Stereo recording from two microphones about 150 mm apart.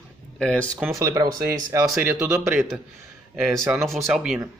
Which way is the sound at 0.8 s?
20° right (ahead or behind).